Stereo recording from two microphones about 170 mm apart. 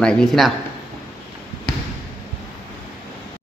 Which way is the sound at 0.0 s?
5° left (ahead or behind).